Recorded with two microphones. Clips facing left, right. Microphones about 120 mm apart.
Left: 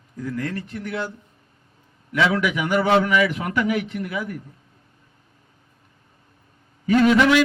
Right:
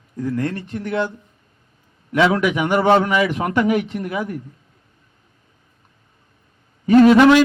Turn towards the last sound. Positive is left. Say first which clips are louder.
# right 6 dB
turn(degrees=-40)  # may be behind; listen again after turning